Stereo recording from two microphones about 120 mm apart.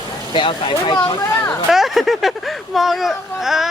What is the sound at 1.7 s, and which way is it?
Speech, centre (ahead or behind).